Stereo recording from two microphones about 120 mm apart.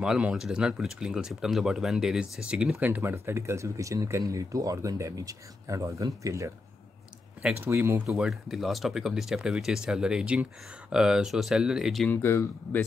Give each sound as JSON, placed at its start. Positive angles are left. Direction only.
{"t": 0.0, "sound": "speech", "side_deg": -5}
{"t": 2.9, "sound": "speech", "side_deg": -20}
{"t": 7.6, "sound": "speech", "side_deg": -20}
{"t": 8.1, "sound": "speech", "side_deg": -5}
{"t": 12.1, "sound": "speech", "side_deg": 20}